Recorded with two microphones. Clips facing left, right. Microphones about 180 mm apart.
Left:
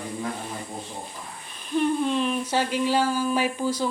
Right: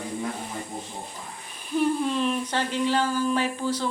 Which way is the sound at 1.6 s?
5° right (ahead or behind).